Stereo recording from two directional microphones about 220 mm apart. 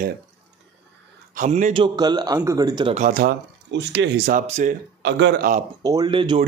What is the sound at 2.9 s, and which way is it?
Speech, 35° right (ahead or behind).